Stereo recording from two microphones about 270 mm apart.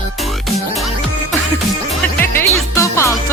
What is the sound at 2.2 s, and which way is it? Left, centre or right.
Music, centre.